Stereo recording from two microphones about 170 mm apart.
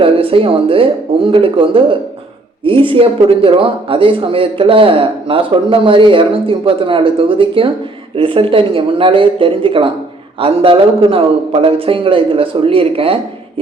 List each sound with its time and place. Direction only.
0.0 s a man's voice: 35° right (ahead or behind)